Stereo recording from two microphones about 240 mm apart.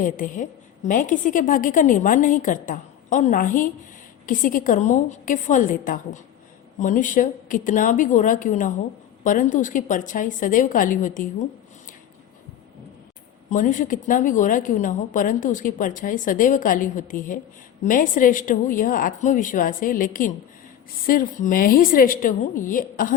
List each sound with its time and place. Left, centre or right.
0.0 s a woman's voice: left
13.5 s a woman's voice: left